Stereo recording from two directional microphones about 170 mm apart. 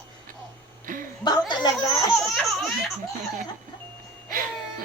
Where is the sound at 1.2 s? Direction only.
25° left (ahead or behind).